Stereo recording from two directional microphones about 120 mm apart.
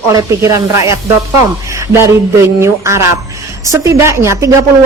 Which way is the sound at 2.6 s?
25° right (ahead or behind).